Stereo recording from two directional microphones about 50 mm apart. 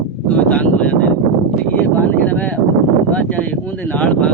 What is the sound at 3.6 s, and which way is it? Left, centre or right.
Speech, left.